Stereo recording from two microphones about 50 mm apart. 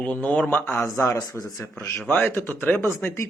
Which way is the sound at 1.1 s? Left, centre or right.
Left.